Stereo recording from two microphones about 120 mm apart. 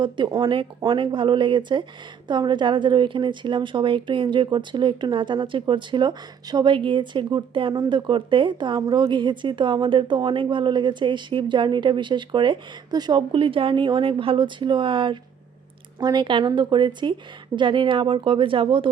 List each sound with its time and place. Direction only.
0.0 s speech: 40° right (ahead or behind)